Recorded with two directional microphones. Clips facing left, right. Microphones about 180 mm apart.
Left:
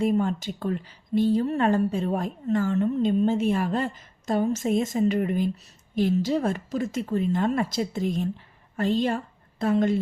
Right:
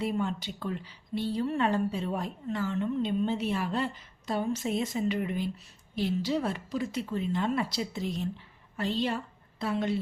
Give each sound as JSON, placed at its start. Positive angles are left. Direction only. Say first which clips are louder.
{"t": 0.0, "sound": "a woman's voice", "louder": "left 7 dB", "side_deg": 45}